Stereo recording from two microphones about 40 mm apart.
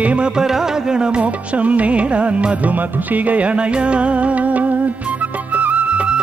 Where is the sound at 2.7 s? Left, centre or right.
Right.